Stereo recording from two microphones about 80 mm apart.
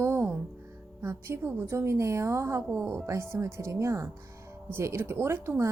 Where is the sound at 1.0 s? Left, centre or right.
Right.